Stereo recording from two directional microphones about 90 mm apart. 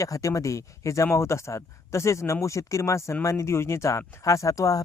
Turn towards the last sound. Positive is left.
turn(degrees=40)  # may be behind; listen again after turning